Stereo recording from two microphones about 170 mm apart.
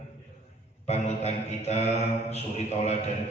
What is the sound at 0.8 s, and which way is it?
A man's voice, 40° left (ahead or behind).